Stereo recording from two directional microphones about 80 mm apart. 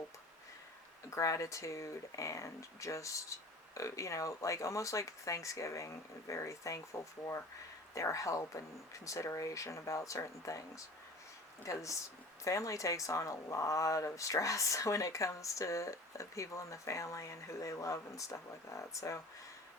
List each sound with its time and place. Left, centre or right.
1.1 s speech: left
11.6 s speech: left